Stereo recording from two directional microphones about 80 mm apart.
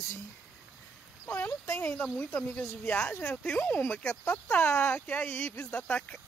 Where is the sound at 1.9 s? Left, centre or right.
Centre.